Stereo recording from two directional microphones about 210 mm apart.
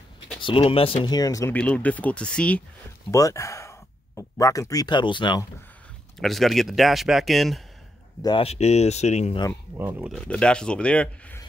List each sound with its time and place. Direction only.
0.4 s speech: 25° left (ahead or behind)
6.1 s speech: centre (ahead or behind)
8.2 s speech: 25° left (ahead or behind)
9.8 s speech: 10° right (ahead or behind)
10.1 s speech: 5° left (ahead or behind)